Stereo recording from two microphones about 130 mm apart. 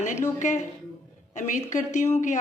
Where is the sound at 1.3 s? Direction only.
70° left (ahead or behind).